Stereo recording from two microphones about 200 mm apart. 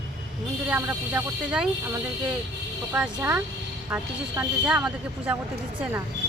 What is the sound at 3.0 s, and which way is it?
Speech, 5° right (ahead or behind).